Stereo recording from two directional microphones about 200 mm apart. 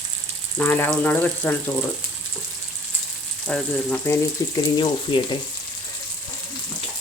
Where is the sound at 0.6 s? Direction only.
10° left (ahead or behind).